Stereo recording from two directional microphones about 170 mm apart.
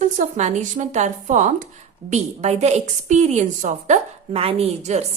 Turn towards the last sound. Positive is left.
turn(degrees=-40)  # may be behind; listen again after turning